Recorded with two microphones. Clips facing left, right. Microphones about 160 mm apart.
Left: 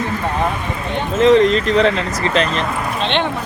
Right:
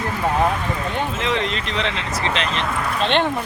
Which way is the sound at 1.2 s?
40° left (ahead or behind).